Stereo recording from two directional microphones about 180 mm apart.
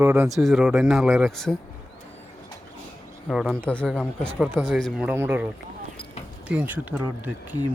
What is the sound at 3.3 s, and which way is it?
Speech, 5° right (ahead or behind).